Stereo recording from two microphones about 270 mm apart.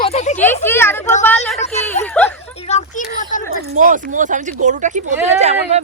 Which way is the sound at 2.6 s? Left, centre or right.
Left.